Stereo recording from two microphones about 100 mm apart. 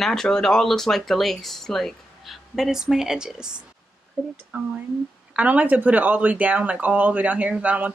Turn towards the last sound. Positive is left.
turn(degrees=-15)  # may be behind; listen again after turning